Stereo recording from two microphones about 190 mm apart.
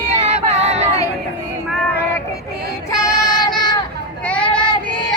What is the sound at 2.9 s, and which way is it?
Child singing, 20° left (ahead or behind).